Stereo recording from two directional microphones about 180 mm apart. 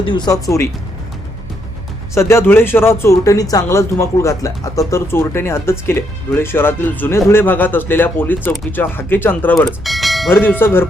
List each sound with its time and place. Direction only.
0.0 s speech: 25° left (ahead or behind)
2.1 s speech: 15° left (ahead or behind); by 10.2 s centre (ahead or behind)
10.2 s speech: 10° left (ahead or behind)